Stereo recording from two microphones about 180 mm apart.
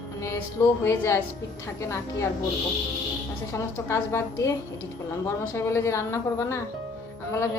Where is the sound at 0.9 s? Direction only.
15° left (ahead or behind).